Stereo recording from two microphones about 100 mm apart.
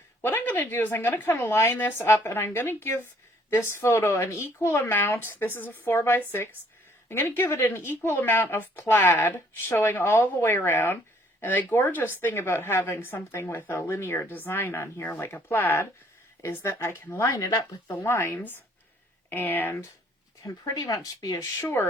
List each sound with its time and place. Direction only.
0.2 s speech: 20° left (ahead or behind)
20.4 s speech: 35° left (ahead or behind)